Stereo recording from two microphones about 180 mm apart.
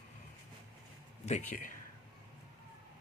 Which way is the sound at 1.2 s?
40° left (ahead or behind).